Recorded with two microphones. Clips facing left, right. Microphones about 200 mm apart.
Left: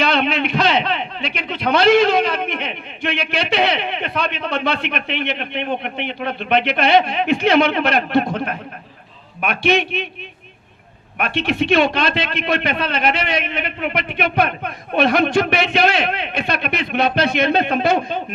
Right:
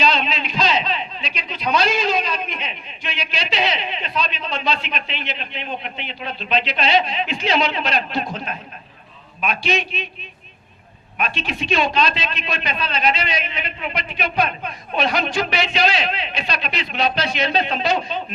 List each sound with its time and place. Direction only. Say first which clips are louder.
0.0 s a man's voice: left 4 dB; 60° left (ahead or behind)
11.2 s a man's voice: left 6 dB; 60° left (ahead or behind)